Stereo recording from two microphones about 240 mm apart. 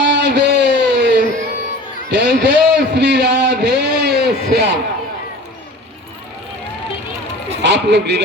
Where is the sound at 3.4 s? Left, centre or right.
Right.